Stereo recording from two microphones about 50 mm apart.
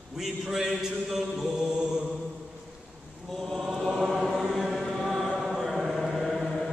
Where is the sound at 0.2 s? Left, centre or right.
Centre.